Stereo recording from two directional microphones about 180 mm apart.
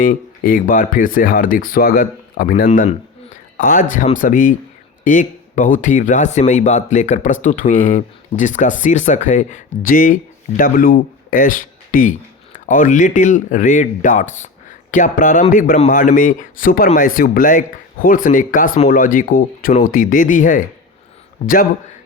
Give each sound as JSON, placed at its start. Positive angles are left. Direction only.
{"t": 0.0, "sound": "speech", "side_deg": 50}
{"t": 2.6, "sound": "a sound", "side_deg": 45}
{"t": 3.9, "sound": "speech", "side_deg": 45}